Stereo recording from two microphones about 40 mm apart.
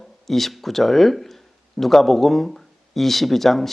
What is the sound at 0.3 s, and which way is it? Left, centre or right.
Speech, centre.